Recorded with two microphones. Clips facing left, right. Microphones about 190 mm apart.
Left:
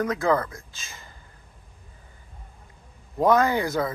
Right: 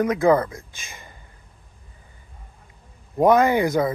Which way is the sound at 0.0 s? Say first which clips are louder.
Right 5 dB; 20° right (ahead or behind).